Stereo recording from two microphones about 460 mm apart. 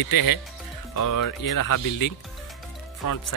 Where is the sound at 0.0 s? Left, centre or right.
Left.